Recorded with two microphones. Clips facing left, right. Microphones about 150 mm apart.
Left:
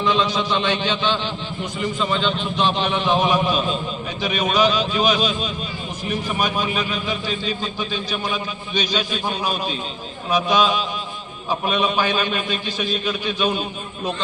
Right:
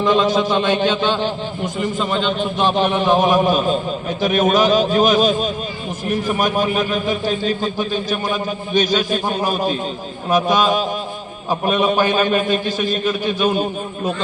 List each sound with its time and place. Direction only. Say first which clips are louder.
0.0 s a man's voice: right 5 dB; 50° right (ahead or behind)